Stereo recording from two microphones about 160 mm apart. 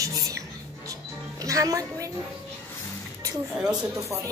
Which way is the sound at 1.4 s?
20° right (ahead or behind).